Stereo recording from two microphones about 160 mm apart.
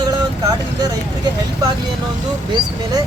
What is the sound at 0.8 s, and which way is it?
Speech, 25° right (ahead or behind).